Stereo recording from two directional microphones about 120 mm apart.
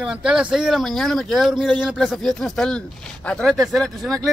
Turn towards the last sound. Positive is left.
turn(degrees=0)  # may be behind; listen again after turning